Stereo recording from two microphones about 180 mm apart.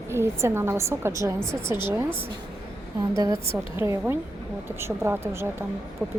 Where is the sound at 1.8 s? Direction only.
15° right (ahead or behind).